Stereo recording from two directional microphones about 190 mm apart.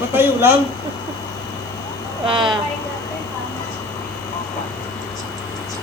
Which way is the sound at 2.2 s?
25° right (ahead or behind).